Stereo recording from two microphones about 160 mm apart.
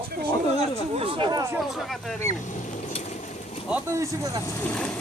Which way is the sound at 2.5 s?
45° left (ahead or behind).